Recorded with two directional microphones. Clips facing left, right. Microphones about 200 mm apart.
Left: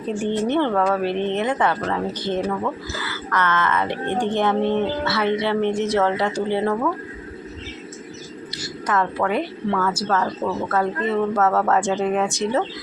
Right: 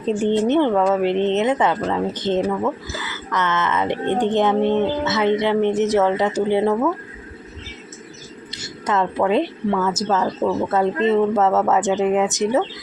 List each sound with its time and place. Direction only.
0.0 s a woman's voice: 20° right (ahead or behind)
8.9 s a woman's voice: 25° right (ahead or behind)
10.7 s a woman's voice: 25° right (ahead or behind)